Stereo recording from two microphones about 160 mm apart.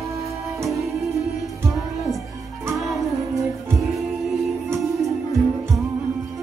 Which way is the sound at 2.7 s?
Centre (ahead or behind).